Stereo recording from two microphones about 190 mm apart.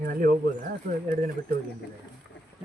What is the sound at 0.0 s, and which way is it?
Speech, 45° right (ahead or behind).